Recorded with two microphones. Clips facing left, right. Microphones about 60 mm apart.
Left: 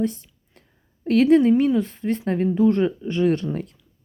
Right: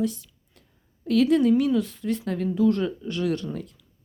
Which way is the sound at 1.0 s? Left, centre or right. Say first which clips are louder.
Left 4 dB; left.